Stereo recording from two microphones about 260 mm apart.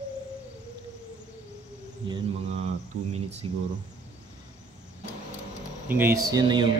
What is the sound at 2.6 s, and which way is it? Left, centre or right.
Speech, right.